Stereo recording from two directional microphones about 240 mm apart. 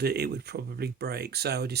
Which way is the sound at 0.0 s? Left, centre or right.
Right.